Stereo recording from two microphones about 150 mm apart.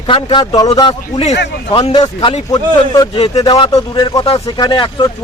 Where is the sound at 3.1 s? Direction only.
40° left (ahead or behind).